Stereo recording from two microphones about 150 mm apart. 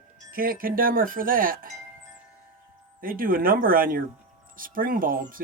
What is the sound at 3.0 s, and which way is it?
Speech, 70° right (ahead or behind).